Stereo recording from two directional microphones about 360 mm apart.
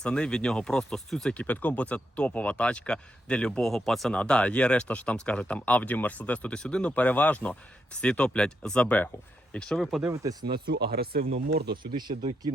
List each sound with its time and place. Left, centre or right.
0.0 s speech: centre
10.7 s speech: right
11.8 s speech: centre